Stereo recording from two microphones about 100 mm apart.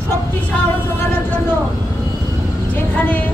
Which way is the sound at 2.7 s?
15° left (ahead or behind).